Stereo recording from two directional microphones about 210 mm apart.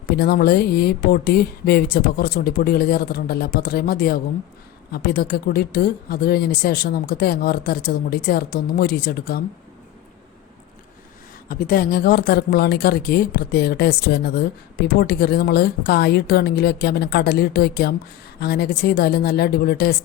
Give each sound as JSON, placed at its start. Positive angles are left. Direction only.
{"t": 0.1, "sound": "speech", "side_deg": 50}
{"t": 11.4, "sound": "speech", "side_deg": 45}